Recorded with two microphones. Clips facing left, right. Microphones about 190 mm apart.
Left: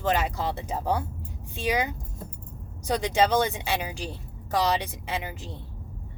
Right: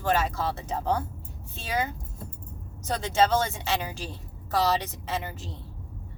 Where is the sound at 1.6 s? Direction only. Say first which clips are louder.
Left 3 dB; 15° left (ahead or behind).